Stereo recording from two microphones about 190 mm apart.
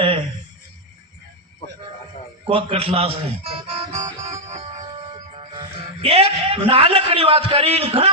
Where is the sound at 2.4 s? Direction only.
30° right (ahead or behind).